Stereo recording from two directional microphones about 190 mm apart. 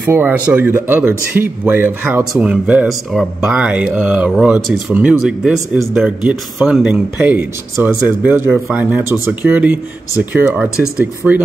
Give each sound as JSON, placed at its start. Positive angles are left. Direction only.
{"t": 0.0, "sound": "speech", "side_deg": -10}